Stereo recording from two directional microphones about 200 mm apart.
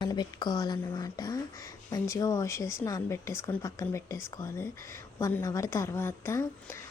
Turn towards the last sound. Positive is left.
turn(degrees=15)  # may be behind; listen again after turning